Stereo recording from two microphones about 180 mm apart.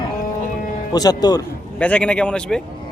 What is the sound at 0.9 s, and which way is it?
Speech, 20° left (ahead or behind).